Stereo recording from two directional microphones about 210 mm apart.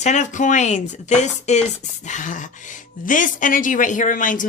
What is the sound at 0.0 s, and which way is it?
A woman's voice, 35° left (ahead or behind).